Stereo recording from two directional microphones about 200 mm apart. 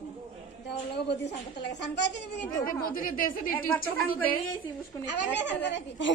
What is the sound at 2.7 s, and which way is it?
Speech, 45° left (ahead or behind).